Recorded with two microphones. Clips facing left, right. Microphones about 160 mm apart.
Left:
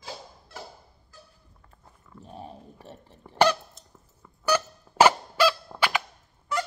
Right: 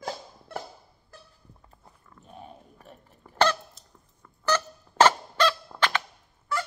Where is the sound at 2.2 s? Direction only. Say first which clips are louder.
Left 4 dB; 35° left (ahead or behind).